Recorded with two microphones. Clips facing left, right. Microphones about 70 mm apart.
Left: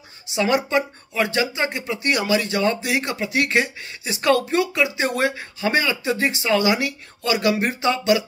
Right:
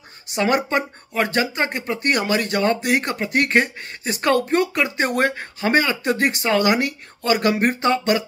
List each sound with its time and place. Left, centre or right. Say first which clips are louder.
0.3 s speech: even; right